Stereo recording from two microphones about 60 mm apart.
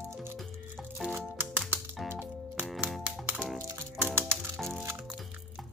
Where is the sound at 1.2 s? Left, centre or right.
Right.